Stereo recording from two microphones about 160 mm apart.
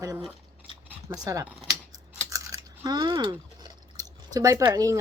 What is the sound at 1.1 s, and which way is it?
Speech, 20° right (ahead or behind).